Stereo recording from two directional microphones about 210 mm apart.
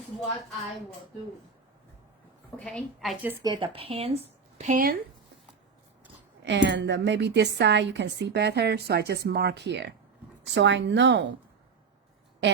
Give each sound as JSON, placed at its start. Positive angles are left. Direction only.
{"t": 2.6, "sound": "a woman's voice", "side_deg": 0}
{"t": 3.4, "sound": "speech", "side_deg": -20}
{"t": 6.4, "sound": "a woman's voice", "side_deg": -55}